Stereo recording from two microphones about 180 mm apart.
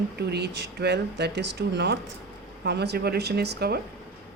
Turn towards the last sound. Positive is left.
turn(degrees=-65)  # may be behind; listen again after turning